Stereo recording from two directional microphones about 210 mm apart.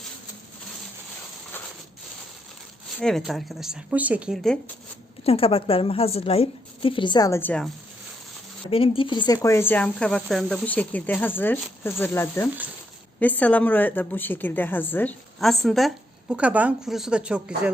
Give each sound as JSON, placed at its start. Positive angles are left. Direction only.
{"t": 3.0, "sound": "speech", "side_deg": 0}
{"t": 5.2, "sound": "a woman's voice", "side_deg": 25}
{"t": 8.7, "sound": "speech", "side_deg": 25}